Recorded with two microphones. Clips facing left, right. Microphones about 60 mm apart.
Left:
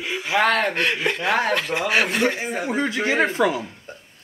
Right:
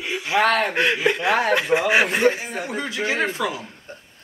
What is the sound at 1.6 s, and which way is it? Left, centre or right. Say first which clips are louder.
Speech: right 3 dB; centre.